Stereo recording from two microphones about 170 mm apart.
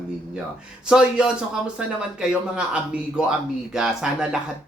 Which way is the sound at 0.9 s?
5° right (ahead or behind).